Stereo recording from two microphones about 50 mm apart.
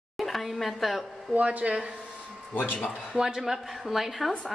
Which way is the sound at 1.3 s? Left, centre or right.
Right.